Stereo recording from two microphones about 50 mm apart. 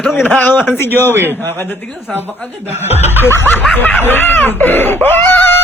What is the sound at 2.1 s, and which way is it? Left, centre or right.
Speech, centre.